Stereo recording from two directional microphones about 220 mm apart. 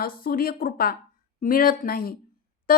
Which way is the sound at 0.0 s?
40° left (ahead or behind).